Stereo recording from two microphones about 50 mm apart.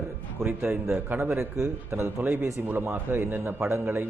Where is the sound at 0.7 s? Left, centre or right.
Right.